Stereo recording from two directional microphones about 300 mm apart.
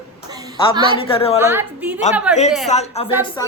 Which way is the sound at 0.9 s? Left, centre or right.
Centre.